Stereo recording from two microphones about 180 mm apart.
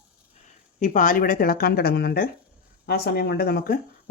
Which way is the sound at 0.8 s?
45° left (ahead or behind).